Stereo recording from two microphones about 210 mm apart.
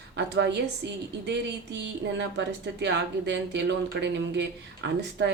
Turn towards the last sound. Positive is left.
turn(degrees=-55)  # may be behind; listen again after turning